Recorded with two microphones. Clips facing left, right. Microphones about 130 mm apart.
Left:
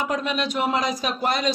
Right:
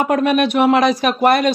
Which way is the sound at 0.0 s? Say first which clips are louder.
Right 10 dB; 60° right (ahead or behind).